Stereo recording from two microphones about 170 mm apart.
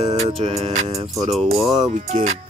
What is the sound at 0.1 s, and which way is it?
Music, 35° right (ahead or behind).